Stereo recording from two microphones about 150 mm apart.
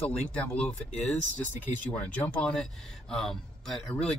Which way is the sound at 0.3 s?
10° left (ahead or behind).